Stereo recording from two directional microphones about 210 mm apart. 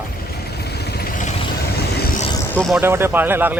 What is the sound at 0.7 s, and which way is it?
Vehicle, 50° left (ahead or behind).